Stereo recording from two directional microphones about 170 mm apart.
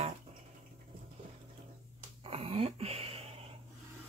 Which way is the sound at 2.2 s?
35° right (ahead or behind).